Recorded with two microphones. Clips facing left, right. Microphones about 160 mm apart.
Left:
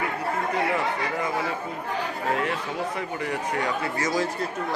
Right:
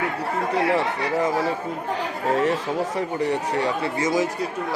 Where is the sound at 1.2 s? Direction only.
35° right (ahead or behind).